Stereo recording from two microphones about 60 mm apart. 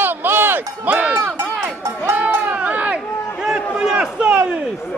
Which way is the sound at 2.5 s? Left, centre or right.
Right.